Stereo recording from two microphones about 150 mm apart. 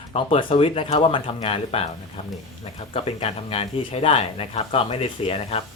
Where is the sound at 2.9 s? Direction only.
40° left (ahead or behind).